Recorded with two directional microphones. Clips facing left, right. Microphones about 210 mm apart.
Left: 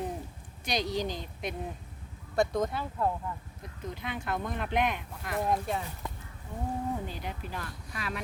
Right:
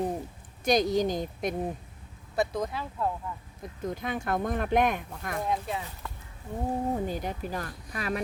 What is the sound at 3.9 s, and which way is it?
Speech, 45° right (ahead or behind).